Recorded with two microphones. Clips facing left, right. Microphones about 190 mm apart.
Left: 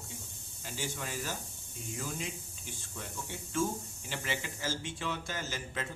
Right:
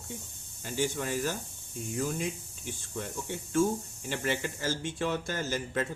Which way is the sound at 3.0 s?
50° right (ahead or behind).